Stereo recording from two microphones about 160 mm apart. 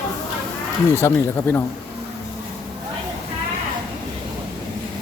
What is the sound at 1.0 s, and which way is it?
Speech, 15° left (ahead or behind).